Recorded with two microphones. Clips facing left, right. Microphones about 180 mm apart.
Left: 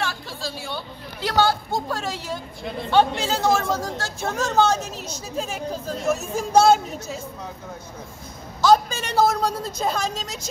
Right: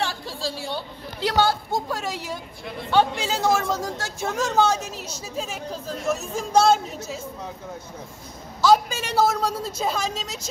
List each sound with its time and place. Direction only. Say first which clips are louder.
0.0 s a sound: right 1 dB; 35° right (ahead or behind)
1.2 s a woman's voice: left 1 dB; 15° right (ahead or behind); by 7.2 s centre (ahead or behind)
8.5 s a woman's voice: left 1 dB; 5° right (ahead or behind)